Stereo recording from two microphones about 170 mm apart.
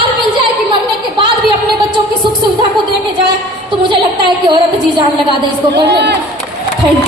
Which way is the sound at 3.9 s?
25° right (ahead or behind).